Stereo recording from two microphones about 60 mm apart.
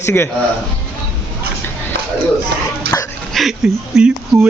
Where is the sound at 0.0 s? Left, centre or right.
Left.